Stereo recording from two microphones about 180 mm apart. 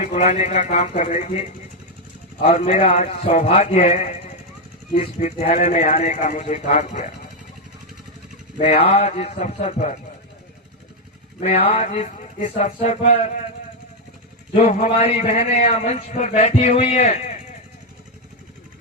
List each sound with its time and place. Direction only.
0.0 s a man's voice: 40° left (ahead or behind)
8.5 s a man's voice: 35° left (ahead or behind)
11.3 s a man's voice: 35° left (ahead or behind)
14.5 s a man's voice: 35° left (ahead or behind)